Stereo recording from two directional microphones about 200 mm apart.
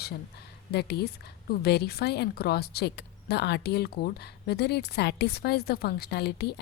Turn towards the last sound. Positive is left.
turn(degrees=55)  # may be behind; listen again after turning